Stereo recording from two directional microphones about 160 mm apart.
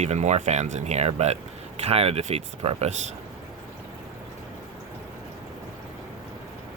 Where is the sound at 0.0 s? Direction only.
45° right (ahead or behind).